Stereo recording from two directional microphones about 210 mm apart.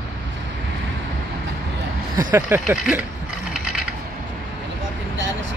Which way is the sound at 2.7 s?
5° right (ahead or behind).